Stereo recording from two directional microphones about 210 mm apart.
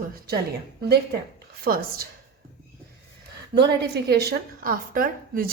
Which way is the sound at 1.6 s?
45° right (ahead or behind).